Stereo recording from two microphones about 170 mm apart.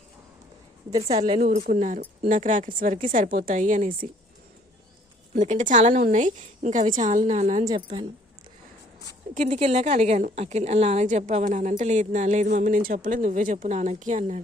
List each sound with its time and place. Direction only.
0.9 s a woman's voice: 35° right (ahead or behind)
2.0 s speech: 60° right (ahead or behind)
5.3 s speech: 45° right (ahead or behind)
7.6 s speech: 25° right (ahead or behind)
9.3 s speech: 40° right (ahead or behind)